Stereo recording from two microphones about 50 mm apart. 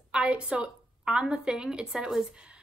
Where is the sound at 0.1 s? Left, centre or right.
Right.